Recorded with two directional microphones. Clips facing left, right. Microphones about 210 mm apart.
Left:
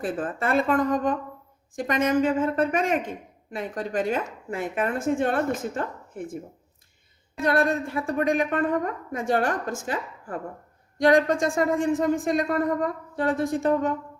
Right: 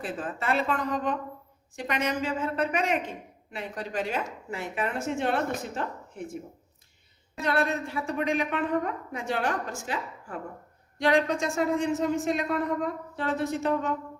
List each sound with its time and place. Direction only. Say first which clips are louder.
0.0 s a woman's voice: left 5 dB; 50° left (ahead or behind)
7.4 s a woman's voice: left 4 dB; 50° left (ahead or behind)